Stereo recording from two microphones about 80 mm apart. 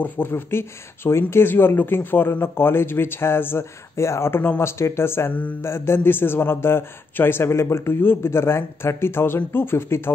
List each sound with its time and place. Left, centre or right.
0.0 s a man's voice: left